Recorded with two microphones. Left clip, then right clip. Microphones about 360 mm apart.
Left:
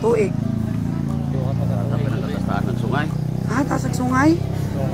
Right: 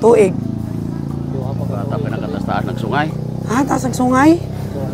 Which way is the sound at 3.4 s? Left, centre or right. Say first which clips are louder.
Right 6 dB; right.